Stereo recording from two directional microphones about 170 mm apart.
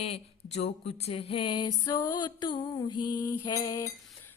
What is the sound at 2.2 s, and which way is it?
Mantra, 25° left (ahead or behind).